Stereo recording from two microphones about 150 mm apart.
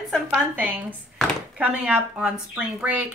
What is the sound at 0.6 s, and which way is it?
Speech, 10° right (ahead or behind).